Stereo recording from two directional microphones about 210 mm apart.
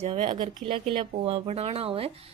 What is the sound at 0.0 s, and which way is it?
Speech, 25° right (ahead or behind).